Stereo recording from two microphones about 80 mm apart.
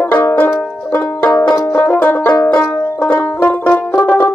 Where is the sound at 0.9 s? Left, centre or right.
Left.